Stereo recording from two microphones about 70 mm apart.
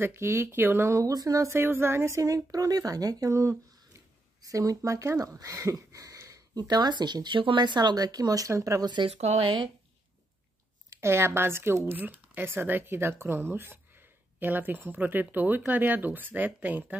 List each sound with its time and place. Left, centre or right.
0.0 s speech: right
0.8 s speech: right
1.5 s speech: right
10.9 s speech: right